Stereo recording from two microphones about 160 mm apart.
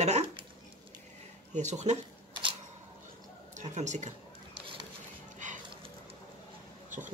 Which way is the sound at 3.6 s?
50° right (ahead or behind).